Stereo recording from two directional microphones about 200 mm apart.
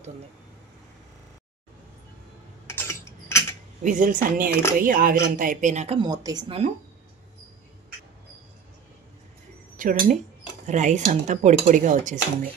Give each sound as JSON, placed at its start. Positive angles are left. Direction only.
{"t": 2.6, "sound": "typing", "side_deg": 15}
{"t": 3.8, "sound": "speech", "side_deg": -40}
{"t": 5.9, "sound": "speech", "side_deg": -20}
{"t": 9.8, "sound": "speech", "side_deg": -45}